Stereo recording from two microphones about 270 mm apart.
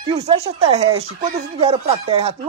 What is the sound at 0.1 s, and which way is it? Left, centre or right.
Speech, right.